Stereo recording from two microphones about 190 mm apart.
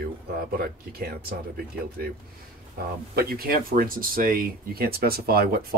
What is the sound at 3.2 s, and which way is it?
Speech, 50° right (ahead or behind).